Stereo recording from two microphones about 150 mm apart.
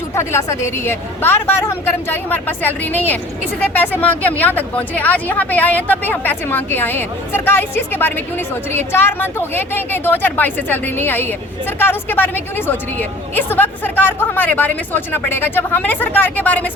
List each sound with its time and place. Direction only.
0.1 s speech: 20° left (ahead or behind)